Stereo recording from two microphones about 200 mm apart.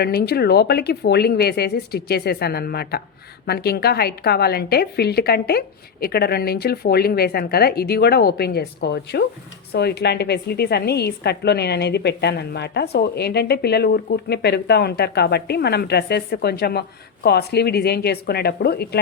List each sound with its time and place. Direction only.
0.0 s a woman's voice: 50° left (ahead or behind)